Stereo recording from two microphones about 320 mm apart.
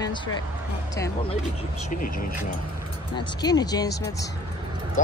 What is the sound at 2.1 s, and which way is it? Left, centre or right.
Speech, left.